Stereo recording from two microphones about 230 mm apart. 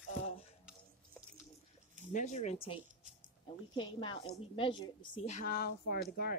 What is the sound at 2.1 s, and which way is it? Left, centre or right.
Speech, left.